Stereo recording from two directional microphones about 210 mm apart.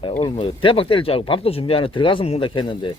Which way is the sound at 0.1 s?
25° left (ahead or behind).